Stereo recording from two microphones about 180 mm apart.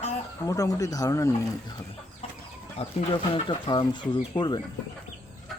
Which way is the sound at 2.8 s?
30° left (ahead or behind).